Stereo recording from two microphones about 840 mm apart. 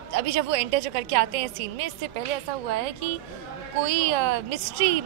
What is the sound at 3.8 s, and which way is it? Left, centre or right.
A woman's voice, right.